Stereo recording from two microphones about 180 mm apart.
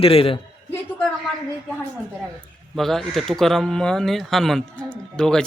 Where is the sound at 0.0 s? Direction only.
30° left (ahead or behind).